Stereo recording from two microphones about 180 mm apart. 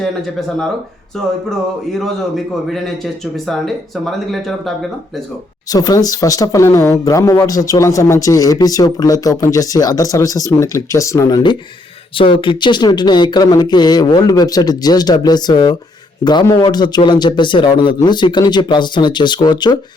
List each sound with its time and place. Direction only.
0.0 s a man's voice: 5° left (ahead or behind)
5.7 s speech: 20° left (ahead or behind)